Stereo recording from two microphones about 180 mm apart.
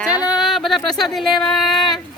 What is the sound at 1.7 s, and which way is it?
Speech, 25° left (ahead or behind).